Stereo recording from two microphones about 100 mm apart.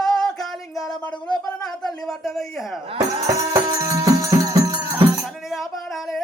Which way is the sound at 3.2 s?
35° right (ahead or behind).